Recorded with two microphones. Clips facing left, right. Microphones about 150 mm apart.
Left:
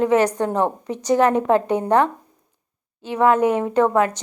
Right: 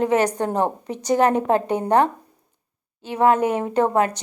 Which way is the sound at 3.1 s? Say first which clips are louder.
Left 1 dB; 35° right (ahead or behind).